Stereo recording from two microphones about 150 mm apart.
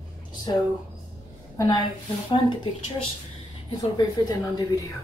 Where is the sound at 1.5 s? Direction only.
25° left (ahead or behind).